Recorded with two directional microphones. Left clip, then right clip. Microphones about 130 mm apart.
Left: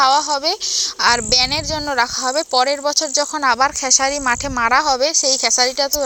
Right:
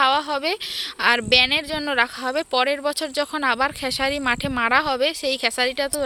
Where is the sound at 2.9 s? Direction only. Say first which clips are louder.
Left 6 dB; 45° right (ahead or behind).